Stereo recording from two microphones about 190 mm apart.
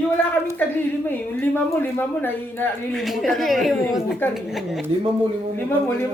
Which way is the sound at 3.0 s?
Centre (ahead or behind).